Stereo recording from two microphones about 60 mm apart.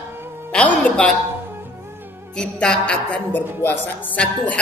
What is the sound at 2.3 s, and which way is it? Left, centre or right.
Speech, centre.